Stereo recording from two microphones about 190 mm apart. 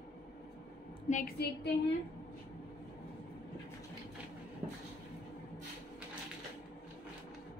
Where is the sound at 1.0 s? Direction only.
45° left (ahead or behind).